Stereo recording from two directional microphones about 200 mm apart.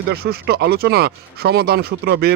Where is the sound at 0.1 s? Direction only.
50° right (ahead or behind).